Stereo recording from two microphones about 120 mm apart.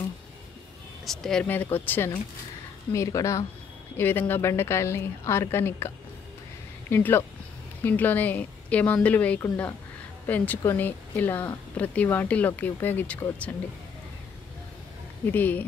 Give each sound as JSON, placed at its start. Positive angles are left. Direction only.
{"t": 1.0, "sound": "speech", "side_deg": 5}
{"t": 1.5, "sound": "a woman's voice", "side_deg": 15}
{"t": 6.9, "sound": "speech", "side_deg": 15}
{"t": 15.2, "sound": "speech", "side_deg": 15}